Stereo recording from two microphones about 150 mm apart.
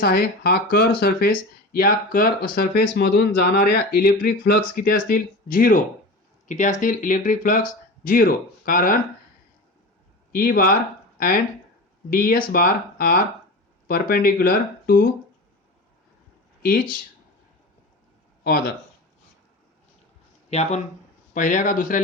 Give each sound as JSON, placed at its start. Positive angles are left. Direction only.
{"t": 0.0, "sound": "speech", "side_deg": 90}
{"t": 6.5, "sound": "speech", "side_deg": 55}
{"t": 10.3, "sound": "speech", "side_deg": 75}
{"t": 12.1, "sound": "speech", "side_deg": 70}
{"t": 18.4, "sound": "speech", "side_deg": 90}
{"t": 20.5, "sound": "speech", "side_deg": 50}
{"t": 21.3, "sound": "speech", "side_deg": 60}